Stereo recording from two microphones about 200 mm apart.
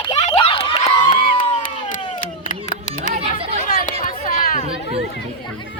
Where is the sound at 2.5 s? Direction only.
40° left (ahead or behind).